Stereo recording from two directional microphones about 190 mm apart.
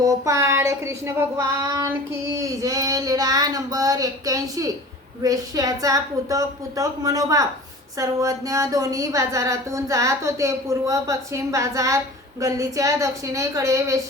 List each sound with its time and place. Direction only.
0.0 s speech: 15° right (ahead or behind)
2.4 s child singing: 15° right (ahead or behind)
7.9 s speech: 15° right (ahead or behind)